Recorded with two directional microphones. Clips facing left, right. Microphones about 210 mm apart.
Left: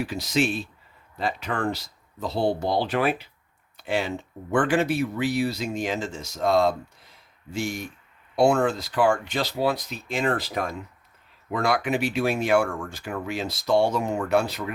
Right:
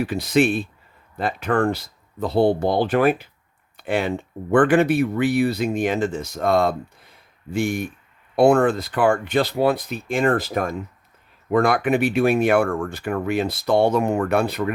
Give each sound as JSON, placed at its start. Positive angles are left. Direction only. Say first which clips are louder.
{"t": 0.0, "sound": "speech", "louder": "right 6 dB", "side_deg": -55}